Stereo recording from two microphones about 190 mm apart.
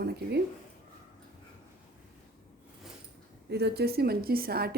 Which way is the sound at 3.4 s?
60° right (ahead or behind).